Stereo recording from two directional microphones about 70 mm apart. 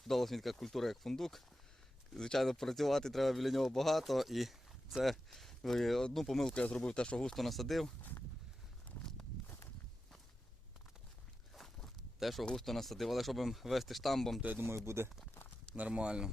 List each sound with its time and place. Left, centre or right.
0.1 s speech: centre
6.5 s speech: centre
11.5 s walk: centre
12.5 s speech: centre
14.4 s speech: right
15.7 s speech: centre